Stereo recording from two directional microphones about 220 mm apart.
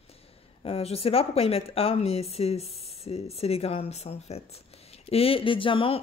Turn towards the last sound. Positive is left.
turn(degrees=25)  # may be behind; listen again after turning